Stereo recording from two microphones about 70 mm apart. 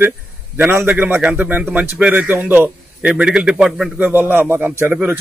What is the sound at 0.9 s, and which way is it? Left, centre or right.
A man's voice, right.